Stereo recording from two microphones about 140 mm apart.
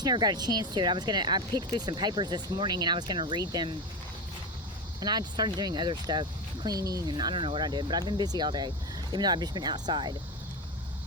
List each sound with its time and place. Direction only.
0.0 s speech: 30° right (ahead or behind)
4.9 s speech: 30° right (ahead or behind)